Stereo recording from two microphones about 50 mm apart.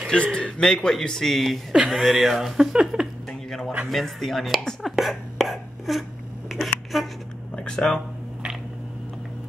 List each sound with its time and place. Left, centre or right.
0.1 s a man's voice: left; by 3.1 s centre
3.3 s a sound: centre
3.9 s speech: centre
7.5 s speech: centre